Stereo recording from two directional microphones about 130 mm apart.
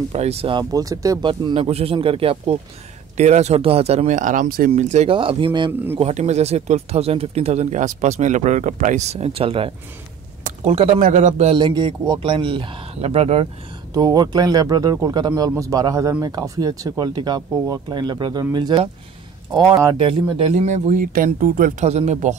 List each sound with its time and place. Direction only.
0.1 s speech: 55° right (ahead or behind)
0.6 s speech: 30° right (ahead or behind)
1.2 s speech: 40° right (ahead or behind)
3.2 s speech: 60° right (ahead or behind)
4.0 s speech: 80° right; by 5.1 s 65° right (ahead or behind)
5.1 s speech: 40° right (ahead or behind)
5.7 s speech: 15° right (ahead or behind)
5.9 s speech: 55° right (ahead or behind)
10.4 s a sound: 55° right (ahead or behind)
11.0 s speech: 75° right (ahead or behind); by 11.5 s 60° right (ahead or behind)
11.5 s speech: 35° right (ahead or behind); by 13.5 s 50° right (ahead or behind)
13.9 s speech: 30° right (ahead or behind)
20.5 s speech: 65° right (ahead or behind)